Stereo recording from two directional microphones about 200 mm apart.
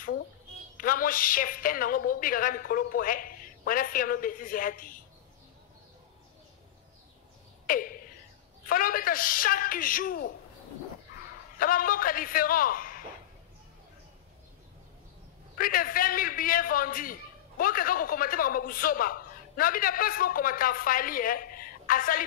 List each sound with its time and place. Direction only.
0.7 s a man's voice: 45° left (ahead or behind)
7.6 s a sound: 45° left (ahead or behind)
8.6 s a man's voice: 45° left (ahead or behind)
11.5 s a man's voice: 45° left (ahead or behind)
15.5 s a man's voice: 45° left (ahead or behind)